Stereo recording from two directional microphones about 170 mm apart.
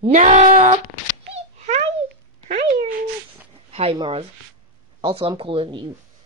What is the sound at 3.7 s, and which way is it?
A woman's voice, 30° right (ahead or behind).